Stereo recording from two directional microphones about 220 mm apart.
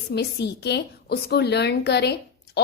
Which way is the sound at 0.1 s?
50° left (ahead or behind).